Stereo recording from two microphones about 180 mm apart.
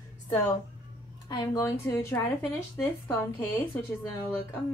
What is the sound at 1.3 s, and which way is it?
Speech, 20° left (ahead or behind).